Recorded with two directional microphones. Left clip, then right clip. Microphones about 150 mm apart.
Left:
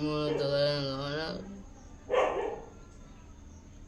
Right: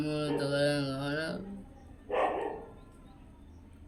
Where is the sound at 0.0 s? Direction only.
25° left (ahead or behind).